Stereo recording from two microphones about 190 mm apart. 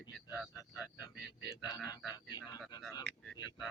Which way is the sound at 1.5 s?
20° left (ahead or behind).